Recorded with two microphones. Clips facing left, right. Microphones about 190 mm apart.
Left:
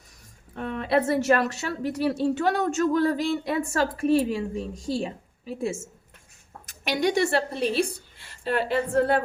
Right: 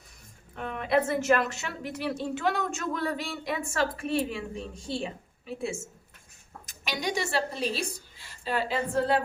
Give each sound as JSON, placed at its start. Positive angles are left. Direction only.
{"t": 0.5, "sound": "a woman's voice", "side_deg": 35}
{"t": 6.7, "sound": "a woman's voice", "side_deg": 60}